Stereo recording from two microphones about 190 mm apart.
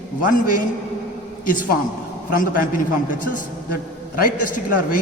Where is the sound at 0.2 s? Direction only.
45° left (ahead or behind).